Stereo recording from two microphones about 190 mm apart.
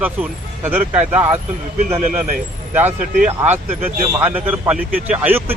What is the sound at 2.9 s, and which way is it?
Speech, 45° right (ahead or behind).